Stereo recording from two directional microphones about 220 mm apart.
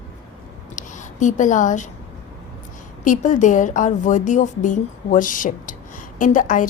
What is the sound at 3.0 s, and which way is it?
A woman's voice, 35° left (ahead or behind).